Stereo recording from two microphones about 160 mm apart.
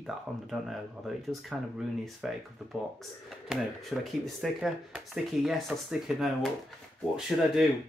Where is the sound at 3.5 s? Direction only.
Centre (ahead or behind).